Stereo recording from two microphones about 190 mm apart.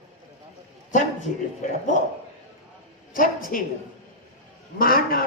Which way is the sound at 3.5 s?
45° left (ahead or behind).